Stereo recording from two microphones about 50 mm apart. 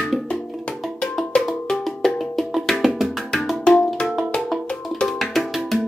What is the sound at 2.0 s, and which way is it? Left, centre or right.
Music, centre.